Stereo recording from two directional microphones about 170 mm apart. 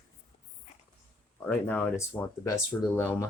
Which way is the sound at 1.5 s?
10° left (ahead or behind).